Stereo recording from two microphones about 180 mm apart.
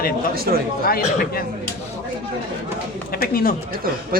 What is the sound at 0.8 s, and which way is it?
Speech, 55° left (ahead or behind).